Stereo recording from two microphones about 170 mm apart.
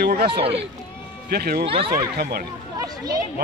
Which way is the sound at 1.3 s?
65° right (ahead or behind).